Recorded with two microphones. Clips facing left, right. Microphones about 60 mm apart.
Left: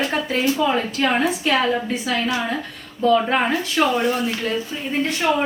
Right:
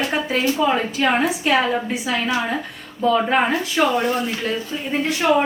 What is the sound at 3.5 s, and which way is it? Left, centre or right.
Speech, right.